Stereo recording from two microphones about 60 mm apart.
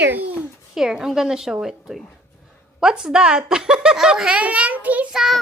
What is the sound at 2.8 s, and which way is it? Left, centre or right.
Speech, centre.